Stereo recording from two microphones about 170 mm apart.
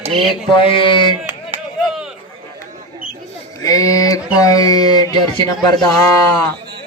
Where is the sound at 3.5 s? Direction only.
20° left (ahead or behind).